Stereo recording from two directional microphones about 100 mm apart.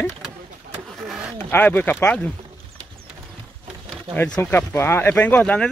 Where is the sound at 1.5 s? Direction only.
15° left (ahead or behind).